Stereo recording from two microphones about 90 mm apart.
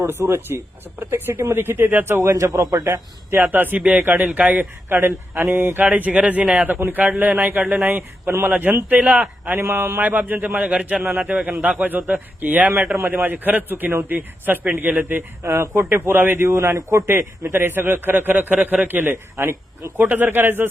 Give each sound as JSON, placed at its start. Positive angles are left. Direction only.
{"t": 0.0, "sound": "a man's voice", "side_deg": -25}
{"t": 2.8, "sound": "a man's voice", "side_deg": -30}
{"t": 4.9, "sound": "a man's voice", "side_deg": -25}
{"t": 5.8, "sound": "speech", "side_deg": -15}
{"t": 6.7, "sound": "a man's voice", "side_deg": -25}
{"t": 9.6, "sound": "a man's voice", "side_deg": -25}
{"t": 15.4, "sound": "a man's voice", "side_deg": -30}